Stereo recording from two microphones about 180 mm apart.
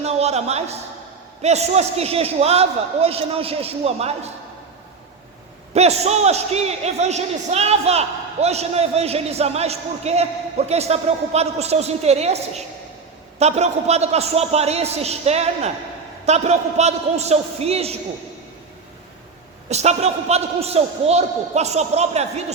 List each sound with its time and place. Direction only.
0.0 s a man's voice: 35° right (ahead or behind)
5.7 s a man's voice: 35° right (ahead or behind)
19.7 s a man's voice: 40° right (ahead or behind)